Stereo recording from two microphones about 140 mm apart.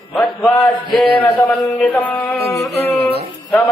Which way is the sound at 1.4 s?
10° left (ahead or behind).